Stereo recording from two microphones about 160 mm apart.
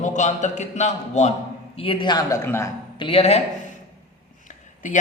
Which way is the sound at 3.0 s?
35° left (ahead or behind).